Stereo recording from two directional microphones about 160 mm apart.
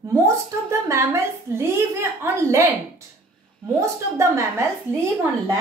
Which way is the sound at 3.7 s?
20° right (ahead or behind).